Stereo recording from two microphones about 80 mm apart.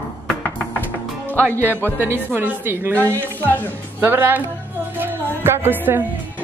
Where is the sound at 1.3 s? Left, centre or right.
Left.